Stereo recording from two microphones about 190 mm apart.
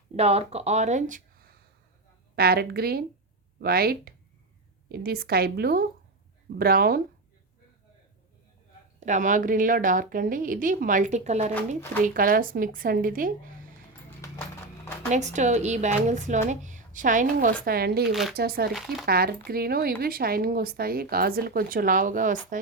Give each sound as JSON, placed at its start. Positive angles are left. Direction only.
{"t": 0.2, "sound": "a woman's voice", "side_deg": -35}
{"t": 9.0, "sound": "speech", "side_deg": -40}
{"t": 14.2, "sound": "clip-clop", "side_deg": 15}
{"t": 15.1, "sound": "a woman's voice", "side_deg": -40}
{"t": 18.1, "sound": "speech", "side_deg": 0}
{"t": 18.3, "sound": "speech", "side_deg": -55}